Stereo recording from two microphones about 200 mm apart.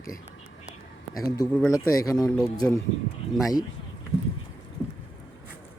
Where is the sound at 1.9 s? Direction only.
15° left (ahead or behind).